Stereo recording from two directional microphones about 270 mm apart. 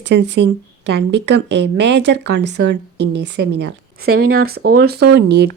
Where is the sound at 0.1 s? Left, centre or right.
Right.